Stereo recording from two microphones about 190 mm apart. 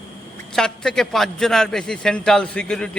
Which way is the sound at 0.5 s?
5° left (ahead or behind).